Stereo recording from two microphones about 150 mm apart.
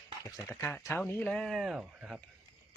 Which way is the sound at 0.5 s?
10° left (ahead or behind).